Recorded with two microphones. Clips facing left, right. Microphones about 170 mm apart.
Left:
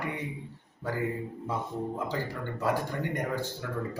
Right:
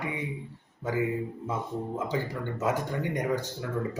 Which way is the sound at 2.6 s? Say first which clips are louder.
Even; 20° right (ahead or behind).